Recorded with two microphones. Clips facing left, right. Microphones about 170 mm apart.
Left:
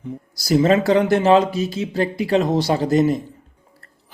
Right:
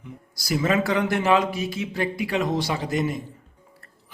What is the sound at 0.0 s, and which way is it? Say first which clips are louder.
Speech: left 10 dB; 35° left (ahead or behind).